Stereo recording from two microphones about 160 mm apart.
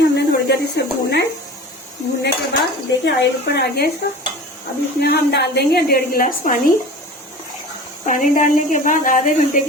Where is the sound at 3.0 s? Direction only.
90° left.